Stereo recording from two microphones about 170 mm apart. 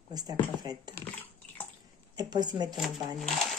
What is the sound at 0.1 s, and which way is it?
Speech, 25° right (ahead or behind).